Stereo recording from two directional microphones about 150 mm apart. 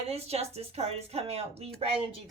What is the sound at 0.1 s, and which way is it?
A woman's voice, 45° right (ahead or behind).